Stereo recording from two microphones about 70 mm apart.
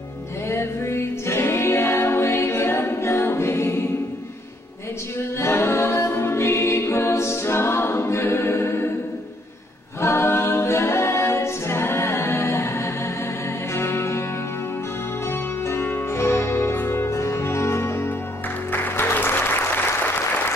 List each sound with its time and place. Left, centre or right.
0.5 s music: left
5.4 s a capella: left
10.0 s a capella: left
13.7 s music: left
15.6 s music: left